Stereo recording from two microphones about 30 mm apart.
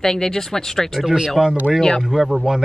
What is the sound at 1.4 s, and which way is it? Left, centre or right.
Speech, centre.